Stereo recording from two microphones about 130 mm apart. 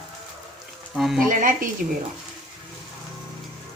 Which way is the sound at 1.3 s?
90° right.